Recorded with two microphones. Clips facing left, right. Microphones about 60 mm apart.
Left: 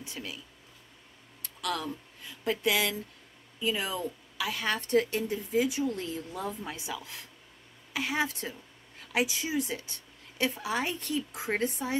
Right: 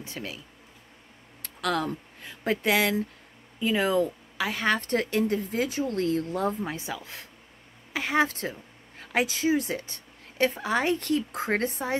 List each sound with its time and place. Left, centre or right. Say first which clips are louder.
0.0 s speech: right 4 dB; right
1.6 s speech: right 6 dB; right
6.6 s speech: right 5 dB; right
7.9 s speech: right 5 dB; right